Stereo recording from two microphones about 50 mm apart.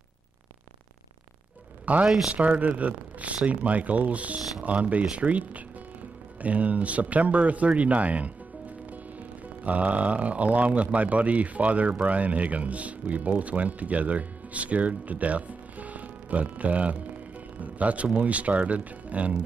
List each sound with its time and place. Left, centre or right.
2.0 s speech: centre
2.3 s speech: right
9.6 s speech: right